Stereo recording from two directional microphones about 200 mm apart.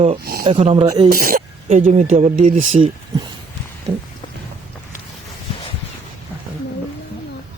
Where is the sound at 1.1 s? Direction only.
45° right (ahead or behind).